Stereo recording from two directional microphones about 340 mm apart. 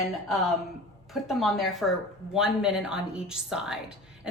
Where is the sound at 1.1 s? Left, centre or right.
Centre.